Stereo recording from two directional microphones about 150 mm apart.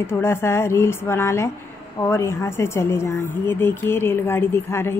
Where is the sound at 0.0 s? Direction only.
15° left (ahead or behind).